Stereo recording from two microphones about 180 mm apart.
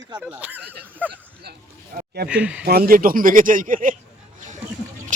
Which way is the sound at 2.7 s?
55° right (ahead or behind).